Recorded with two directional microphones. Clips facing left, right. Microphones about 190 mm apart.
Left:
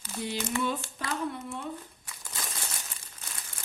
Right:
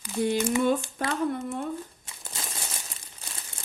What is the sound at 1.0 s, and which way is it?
Speech, 50° right (ahead or behind).